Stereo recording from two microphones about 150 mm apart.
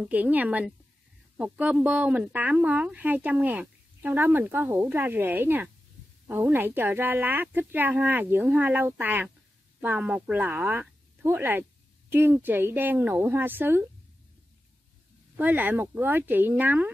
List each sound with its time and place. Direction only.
0.0 s speech: 10° right (ahead or behind)
15.3 s speech: 10° right (ahead or behind)